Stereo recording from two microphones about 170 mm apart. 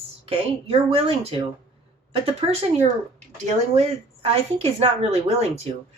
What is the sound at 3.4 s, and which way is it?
A woman's voice, 35° right (ahead or behind).